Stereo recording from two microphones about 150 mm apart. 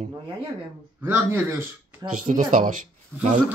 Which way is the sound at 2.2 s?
55° right (ahead or behind).